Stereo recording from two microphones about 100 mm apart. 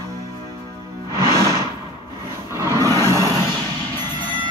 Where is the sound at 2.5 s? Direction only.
30° right (ahead or behind).